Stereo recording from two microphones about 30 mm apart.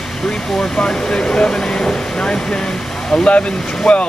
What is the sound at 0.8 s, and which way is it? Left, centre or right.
Speech, left.